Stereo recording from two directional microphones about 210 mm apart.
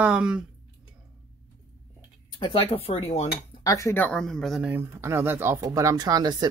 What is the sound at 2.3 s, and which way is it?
Speech, 25° left (ahead or behind).